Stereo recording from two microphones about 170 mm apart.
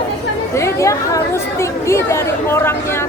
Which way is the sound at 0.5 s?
15° left (ahead or behind).